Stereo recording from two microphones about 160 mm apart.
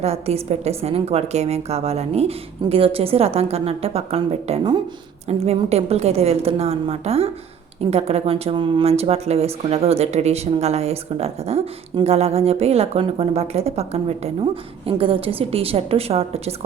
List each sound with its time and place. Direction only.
0.0 s speech: 40° right (ahead or behind)